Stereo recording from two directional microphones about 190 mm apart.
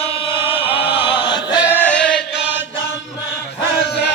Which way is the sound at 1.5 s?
10° right (ahead or behind).